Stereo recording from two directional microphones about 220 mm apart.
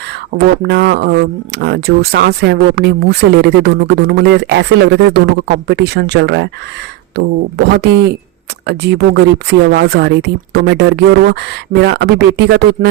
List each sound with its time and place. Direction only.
0.3 s speech: 50° right (ahead or behind)